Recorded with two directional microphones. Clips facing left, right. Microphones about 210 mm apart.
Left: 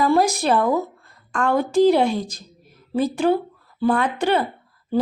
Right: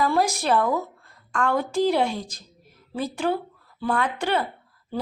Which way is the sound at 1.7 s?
20° left (ahead or behind).